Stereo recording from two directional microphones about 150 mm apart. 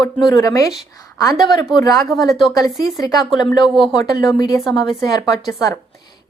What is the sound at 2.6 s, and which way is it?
A woman's voice, 25° left (ahead or behind).